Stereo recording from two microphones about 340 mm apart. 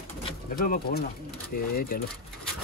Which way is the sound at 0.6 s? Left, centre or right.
Left.